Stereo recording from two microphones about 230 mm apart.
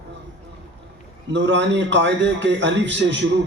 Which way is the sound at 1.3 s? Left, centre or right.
Right.